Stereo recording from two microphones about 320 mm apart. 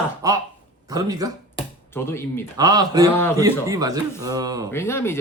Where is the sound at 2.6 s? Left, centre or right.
Centre.